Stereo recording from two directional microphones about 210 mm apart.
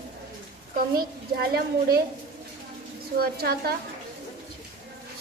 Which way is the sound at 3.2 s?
45° right (ahead or behind).